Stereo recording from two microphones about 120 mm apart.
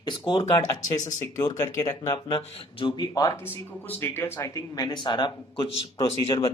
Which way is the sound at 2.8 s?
45° left (ahead or behind).